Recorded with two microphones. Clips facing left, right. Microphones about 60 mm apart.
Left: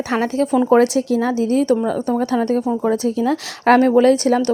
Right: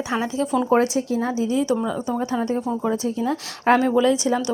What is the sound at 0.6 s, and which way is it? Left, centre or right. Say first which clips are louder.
A woman's voice: left 6 dB; left.